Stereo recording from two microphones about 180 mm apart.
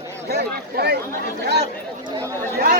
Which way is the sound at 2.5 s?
60° right (ahead or behind).